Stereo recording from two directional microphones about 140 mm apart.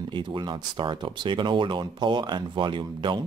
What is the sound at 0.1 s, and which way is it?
Speech, 35° right (ahead or behind).